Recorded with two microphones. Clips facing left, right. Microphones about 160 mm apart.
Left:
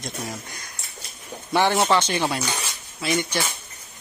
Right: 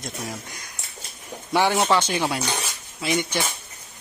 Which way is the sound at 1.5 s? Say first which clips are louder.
Even; 10° right (ahead or behind).